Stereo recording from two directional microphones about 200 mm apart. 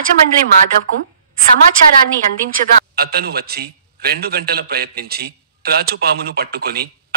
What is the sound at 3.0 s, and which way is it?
A man's voice, 50° right (ahead or behind).